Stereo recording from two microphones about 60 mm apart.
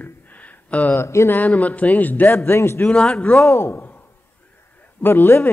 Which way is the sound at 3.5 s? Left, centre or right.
Left.